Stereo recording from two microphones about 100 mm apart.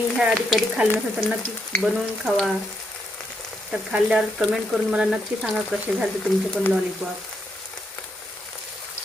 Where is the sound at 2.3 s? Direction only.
Centre (ahead or behind).